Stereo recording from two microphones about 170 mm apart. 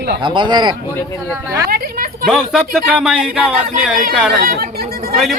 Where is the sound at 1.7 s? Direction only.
60° right (ahead or behind).